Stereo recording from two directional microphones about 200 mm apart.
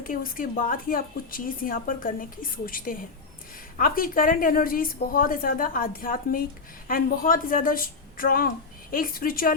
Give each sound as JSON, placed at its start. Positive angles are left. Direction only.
{"t": 0.0, "sound": "speech", "side_deg": 45}